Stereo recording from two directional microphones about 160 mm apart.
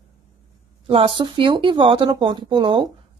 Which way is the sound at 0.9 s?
35° right (ahead or behind).